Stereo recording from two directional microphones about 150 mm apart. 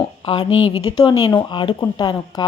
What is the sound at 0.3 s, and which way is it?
Speech, 35° left (ahead or behind).